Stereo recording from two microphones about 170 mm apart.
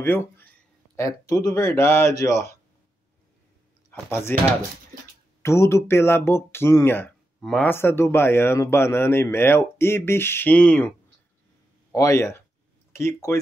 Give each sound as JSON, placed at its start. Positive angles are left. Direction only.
{"t": 0.0, "sound": "speech", "side_deg": 15}
{"t": 3.9, "sound": "speech", "side_deg": 15}
{"t": 5.4, "sound": "speech", "side_deg": 15}
{"t": 11.9, "sound": "speech", "side_deg": 20}